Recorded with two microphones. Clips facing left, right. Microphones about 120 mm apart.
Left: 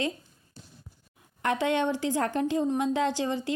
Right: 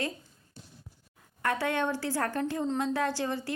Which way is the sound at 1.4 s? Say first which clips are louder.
Left 3 dB; 20° left (ahead or behind).